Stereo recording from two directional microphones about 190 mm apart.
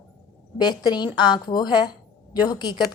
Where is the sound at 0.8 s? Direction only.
20° left (ahead or behind).